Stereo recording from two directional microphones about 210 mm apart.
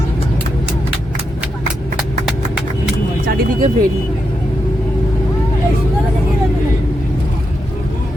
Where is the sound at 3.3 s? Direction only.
40° right (ahead or behind).